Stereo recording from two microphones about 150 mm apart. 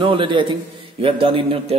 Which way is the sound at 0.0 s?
35° right (ahead or behind).